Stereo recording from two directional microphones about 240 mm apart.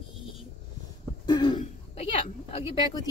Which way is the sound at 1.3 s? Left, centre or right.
Centre.